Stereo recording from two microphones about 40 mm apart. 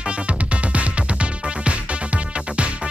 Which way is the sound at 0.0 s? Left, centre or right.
Right.